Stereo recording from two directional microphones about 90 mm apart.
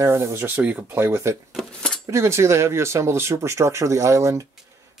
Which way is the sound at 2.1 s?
30° right (ahead or behind).